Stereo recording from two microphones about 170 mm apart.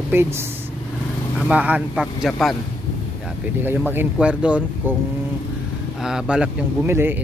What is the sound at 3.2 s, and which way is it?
Speech, 10° right (ahead or behind).